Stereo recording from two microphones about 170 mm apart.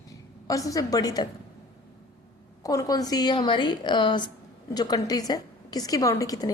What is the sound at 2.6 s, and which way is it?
A woman's voice, 20° left (ahead or behind).